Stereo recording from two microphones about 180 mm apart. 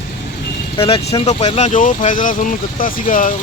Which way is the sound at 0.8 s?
30° left (ahead or behind).